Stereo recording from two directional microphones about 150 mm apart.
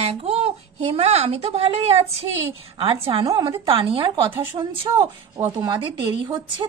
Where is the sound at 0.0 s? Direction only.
40° right (ahead or behind).